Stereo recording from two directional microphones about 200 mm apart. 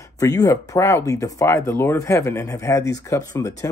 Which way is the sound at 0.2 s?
15° left (ahead or behind).